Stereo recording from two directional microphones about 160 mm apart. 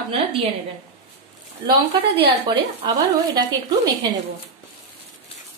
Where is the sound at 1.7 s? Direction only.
30° right (ahead or behind).